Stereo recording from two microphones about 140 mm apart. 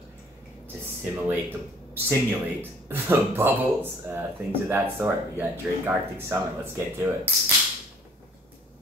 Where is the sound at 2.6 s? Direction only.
15° right (ahead or behind).